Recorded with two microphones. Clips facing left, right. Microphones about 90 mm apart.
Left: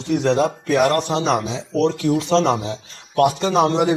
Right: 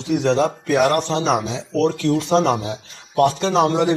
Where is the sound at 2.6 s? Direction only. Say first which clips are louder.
Even; 15° right (ahead or behind).